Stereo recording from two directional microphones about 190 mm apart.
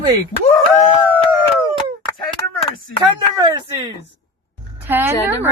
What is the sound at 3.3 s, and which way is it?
Speech, 20° right (ahead or behind).